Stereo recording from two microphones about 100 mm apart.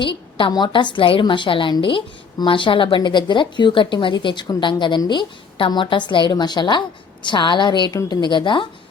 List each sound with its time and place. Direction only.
0.0 s a woman's voice: 55° left (ahead or behind)